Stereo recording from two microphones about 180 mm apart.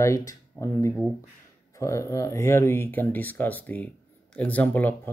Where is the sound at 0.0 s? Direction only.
20° left (ahead or behind).